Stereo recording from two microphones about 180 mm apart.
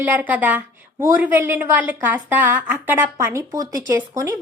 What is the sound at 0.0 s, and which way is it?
A woman's voice, 10° right (ahead or behind).